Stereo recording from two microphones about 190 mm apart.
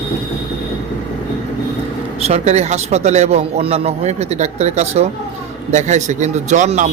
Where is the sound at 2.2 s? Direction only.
35° right (ahead or behind).